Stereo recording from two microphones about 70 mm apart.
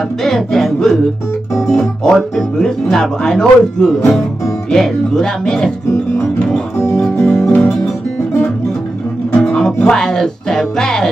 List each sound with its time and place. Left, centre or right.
0.2 s music: centre
2.3 s speech: centre
7.2 s music: centre
9.3 s music: centre
9.8 s speech: centre